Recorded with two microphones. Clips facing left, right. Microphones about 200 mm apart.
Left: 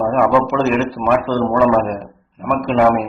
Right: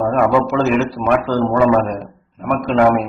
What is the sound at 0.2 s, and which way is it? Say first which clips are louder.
A man's voice: even; centre (ahead or behind).